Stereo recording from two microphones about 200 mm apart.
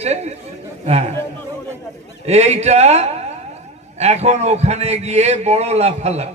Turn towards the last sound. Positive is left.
turn(degrees=-30)  # may be behind; listen again after turning